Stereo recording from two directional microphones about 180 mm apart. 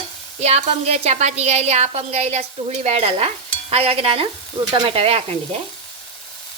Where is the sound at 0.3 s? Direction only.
35° right (ahead or behind).